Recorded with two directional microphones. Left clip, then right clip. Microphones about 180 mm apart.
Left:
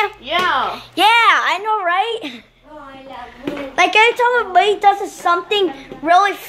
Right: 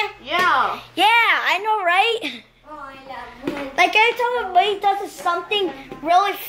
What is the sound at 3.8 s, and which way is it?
Speech, 15° left (ahead or behind).